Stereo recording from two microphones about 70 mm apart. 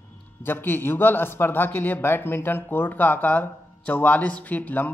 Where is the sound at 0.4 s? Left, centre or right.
Left.